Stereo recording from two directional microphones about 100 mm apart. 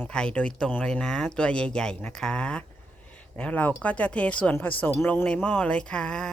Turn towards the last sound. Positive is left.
turn(degrees=10)  # may be behind; listen again after turning